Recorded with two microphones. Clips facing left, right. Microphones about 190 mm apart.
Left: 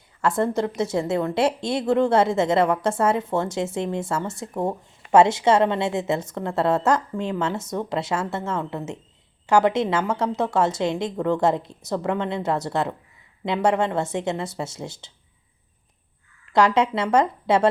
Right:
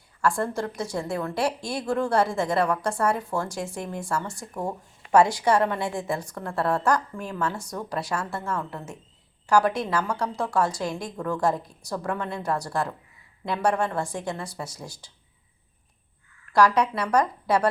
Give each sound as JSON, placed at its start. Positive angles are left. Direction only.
{"t": 0.2, "sound": "a woman's voice", "side_deg": 20}
{"t": 16.5, "sound": "a woman's voice", "side_deg": 25}